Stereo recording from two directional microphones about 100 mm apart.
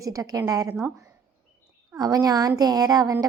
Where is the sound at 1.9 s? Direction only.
40° right (ahead or behind).